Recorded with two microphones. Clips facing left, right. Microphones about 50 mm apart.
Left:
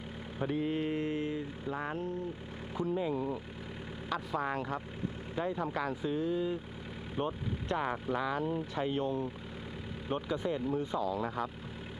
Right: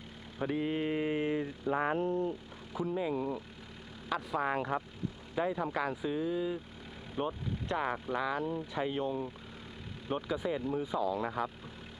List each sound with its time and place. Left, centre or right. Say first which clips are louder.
0.4 s mantra: even; centre
1.1 s speech: right 3 dB; right
2.7 s speech: even; centre
4.1 s mantra: right 2 dB; centre
5.4 s speech: right 2 dB; centre